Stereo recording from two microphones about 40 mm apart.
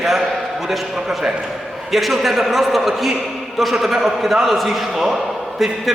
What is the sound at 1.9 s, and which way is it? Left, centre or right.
A man's voice, centre.